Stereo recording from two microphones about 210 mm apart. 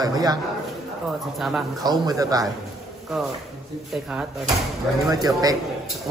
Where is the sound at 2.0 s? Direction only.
15° right (ahead or behind).